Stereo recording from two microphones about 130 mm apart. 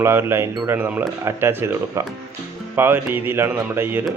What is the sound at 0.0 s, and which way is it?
Speech, 20° right (ahead or behind).